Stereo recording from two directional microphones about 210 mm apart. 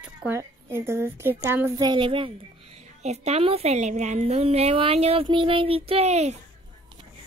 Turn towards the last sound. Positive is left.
turn(degrees=-30)  # may be behind; listen again after turning